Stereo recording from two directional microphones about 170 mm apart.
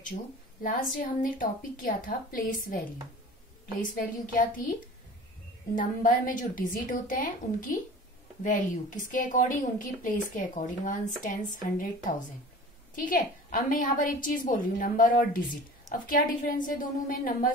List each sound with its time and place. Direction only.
0.1 s a woman's voice: 50° left (ahead or behind)
3.9 s a woman's voice: 55° left (ahead or behind)
5.8 s a woman's voice: 50° left (ahead or behind)